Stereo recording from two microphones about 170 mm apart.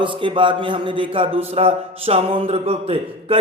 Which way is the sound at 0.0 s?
30° right (ahead or behind).